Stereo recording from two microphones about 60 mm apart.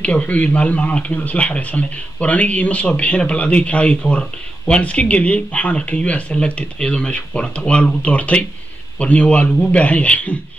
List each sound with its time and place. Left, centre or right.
0.0 s a man's voice: left